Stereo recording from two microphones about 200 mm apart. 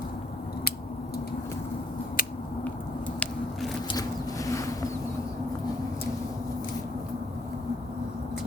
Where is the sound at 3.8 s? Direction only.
20° left (ahead or behind).